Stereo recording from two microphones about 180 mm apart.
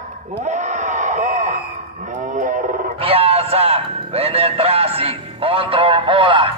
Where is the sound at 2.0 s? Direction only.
45° right (ahead or behind).